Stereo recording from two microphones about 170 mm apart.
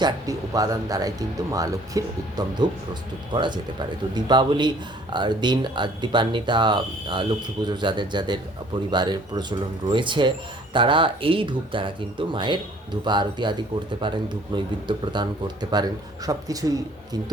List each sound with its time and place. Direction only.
0.0 s speech: 20° right (ahead or behind)